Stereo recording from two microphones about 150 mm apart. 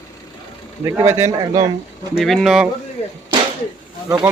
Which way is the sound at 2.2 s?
Centre (ahead or behind).